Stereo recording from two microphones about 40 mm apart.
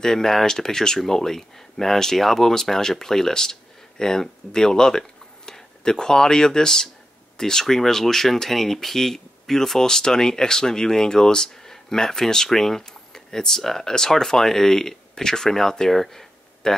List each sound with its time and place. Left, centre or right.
0.0 s speech: centre